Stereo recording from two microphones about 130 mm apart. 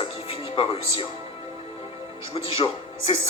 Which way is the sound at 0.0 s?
45° left (ahead or behind).